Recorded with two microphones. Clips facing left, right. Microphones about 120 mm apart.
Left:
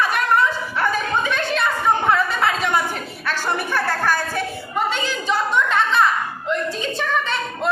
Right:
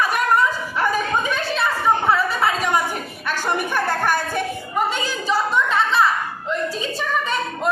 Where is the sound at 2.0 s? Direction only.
5° right (ahead or behind).